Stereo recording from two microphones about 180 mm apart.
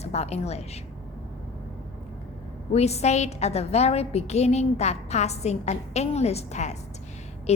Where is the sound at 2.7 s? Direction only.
35° left (ahead or behind).